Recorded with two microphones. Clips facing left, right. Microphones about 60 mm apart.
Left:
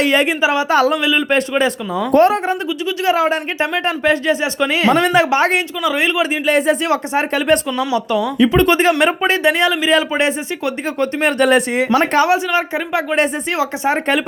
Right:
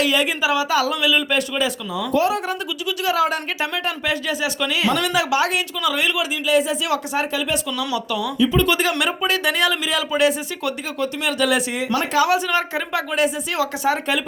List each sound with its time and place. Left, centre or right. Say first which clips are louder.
0.0 s speech: left 5 dB; left
0.7 s speech: left 5 dB; left
3.0 s speech: left 4 dB; left
6.4 s speech: left 2 dB; left
6.9 s speech: left 5 dB; left
7.3 s speech: left 8 dB; left
7.9 s speech: left 8 dB; left
12.5 s speech: left 4 dB; left